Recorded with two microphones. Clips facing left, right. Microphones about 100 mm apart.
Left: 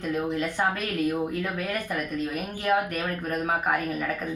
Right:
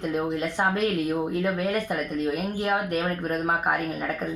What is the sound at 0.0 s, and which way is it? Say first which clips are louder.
Speech: right 1 dB; 25° right (ahead or behind).